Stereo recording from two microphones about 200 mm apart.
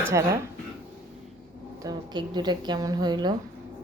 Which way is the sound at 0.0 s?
15° right (ahead or behind).